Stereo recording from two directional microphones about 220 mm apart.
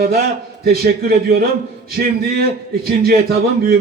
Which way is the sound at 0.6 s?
45° right (ahead or behind).